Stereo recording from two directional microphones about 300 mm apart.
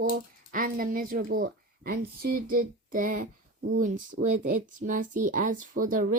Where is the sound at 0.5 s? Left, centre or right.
Right.